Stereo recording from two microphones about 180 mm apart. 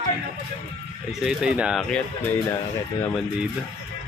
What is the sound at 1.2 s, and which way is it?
Speech, 5° right (ahead or behind).